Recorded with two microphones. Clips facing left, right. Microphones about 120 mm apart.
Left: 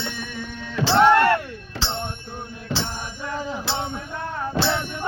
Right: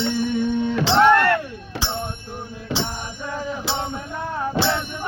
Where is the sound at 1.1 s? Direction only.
15° left (ahead or behind).